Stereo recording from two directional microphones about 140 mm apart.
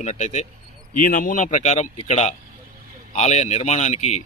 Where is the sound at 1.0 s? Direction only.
70° left (ahead or behind).